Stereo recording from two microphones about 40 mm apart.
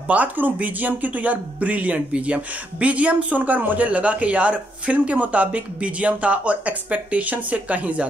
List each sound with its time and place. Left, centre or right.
0.1 s speech: right